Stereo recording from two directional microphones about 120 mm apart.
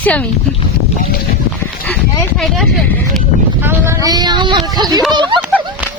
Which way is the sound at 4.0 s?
35° right (ahead or behind).